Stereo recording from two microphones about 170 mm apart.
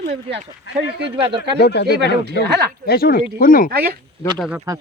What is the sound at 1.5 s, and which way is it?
Speech, 75° left (ahead or behind).